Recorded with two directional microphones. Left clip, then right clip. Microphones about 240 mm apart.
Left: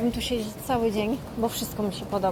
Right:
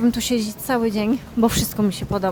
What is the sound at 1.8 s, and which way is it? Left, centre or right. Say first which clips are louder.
Speech: even; right.